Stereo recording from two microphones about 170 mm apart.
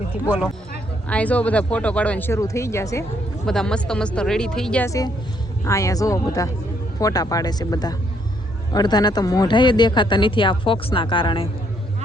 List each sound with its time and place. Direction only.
1.0 s speech: 10° left (ahead or behind)
3.4 s speech: 5° left (ahead or behind)
4.9 s speech: 20° left (ahead or behind)